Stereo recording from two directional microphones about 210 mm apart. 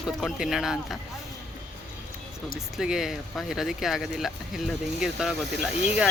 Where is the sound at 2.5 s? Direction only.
Centre (ahead or behind).